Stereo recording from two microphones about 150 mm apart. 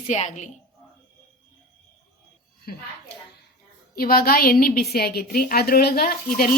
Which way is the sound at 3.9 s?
85° left.